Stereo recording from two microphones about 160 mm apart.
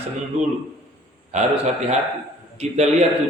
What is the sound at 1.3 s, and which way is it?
A man's voice, 45° right (ahead or behind).